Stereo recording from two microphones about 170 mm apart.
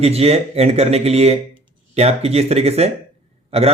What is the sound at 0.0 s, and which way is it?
Speech, 35° right (ahead or behind).